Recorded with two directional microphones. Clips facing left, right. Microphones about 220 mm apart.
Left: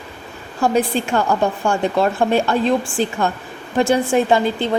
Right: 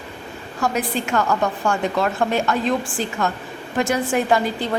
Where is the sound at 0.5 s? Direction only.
30° left (ahead or behind).